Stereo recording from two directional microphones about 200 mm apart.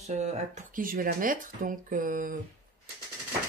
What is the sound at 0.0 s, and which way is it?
Speech, 35° right (ahead or behind).